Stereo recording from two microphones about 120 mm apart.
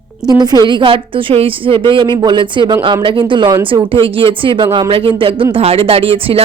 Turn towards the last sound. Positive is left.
turn(degrees=-50)  # may be behind; listen again after turning